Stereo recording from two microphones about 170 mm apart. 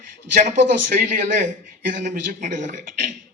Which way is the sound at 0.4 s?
50° right (ahead or behind).